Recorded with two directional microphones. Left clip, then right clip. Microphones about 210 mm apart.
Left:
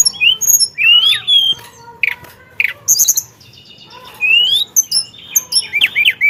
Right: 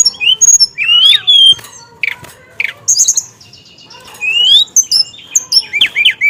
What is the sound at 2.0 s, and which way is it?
Bird, 5° left (ahead or behind).